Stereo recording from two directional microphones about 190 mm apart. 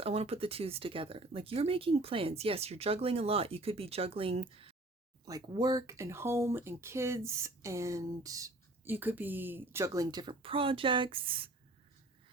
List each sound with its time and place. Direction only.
0.0 s speech: 30° right (ahead or behind)